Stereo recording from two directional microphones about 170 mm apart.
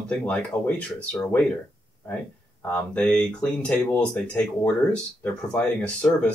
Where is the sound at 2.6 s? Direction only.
5° left (ahead or behind).